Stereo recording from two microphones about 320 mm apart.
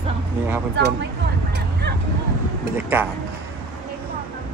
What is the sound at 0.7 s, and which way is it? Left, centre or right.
Speech, right.